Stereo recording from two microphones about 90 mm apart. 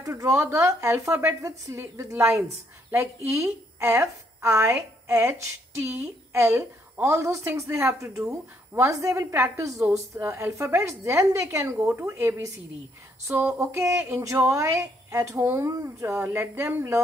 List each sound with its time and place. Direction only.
0.0 s speech: 35° right (ahead or behind)
13.6 s speech: 30° right (ahead or behind)